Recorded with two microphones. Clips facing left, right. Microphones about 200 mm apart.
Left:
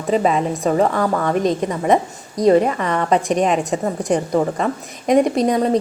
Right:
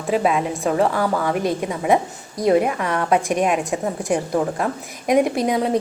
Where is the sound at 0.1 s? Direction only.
5° right (ahead or behind).